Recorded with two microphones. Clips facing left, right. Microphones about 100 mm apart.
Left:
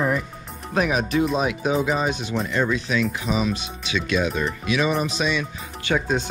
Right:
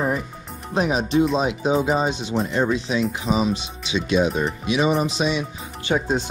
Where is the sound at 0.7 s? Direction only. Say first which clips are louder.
Right 2 dB; 30° right (ahead or behind).